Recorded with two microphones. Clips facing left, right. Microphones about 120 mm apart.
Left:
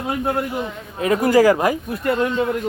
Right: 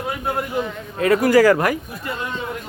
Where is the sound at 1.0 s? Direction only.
20° left (ahead or behind).